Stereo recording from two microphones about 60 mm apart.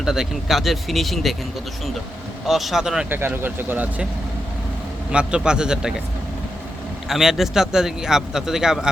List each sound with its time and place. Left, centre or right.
0.0 s speech: centre
2.5 s a man's voice: centre
3.1 s speech: right
5.1 s a man's voice: centre
7.1 s a man's voice: centre